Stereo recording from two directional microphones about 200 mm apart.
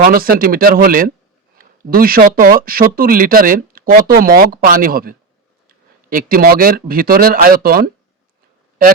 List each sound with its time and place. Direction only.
0.0 s speech: 45° right (ahead or behind)